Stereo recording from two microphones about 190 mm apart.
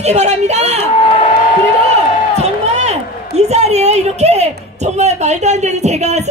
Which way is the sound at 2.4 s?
35° right (ahead or behind).